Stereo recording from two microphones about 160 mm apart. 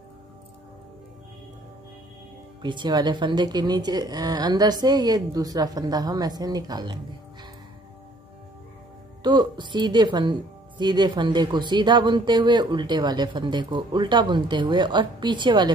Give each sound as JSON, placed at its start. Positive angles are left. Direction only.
{"t": 2.6, "sound": "speech", "side_deg": -30}
{"t": 9.2, "sound": "speech", "side_deg": -30}